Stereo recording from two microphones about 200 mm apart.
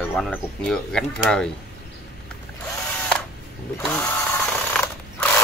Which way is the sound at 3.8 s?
5° left (ahead or behind).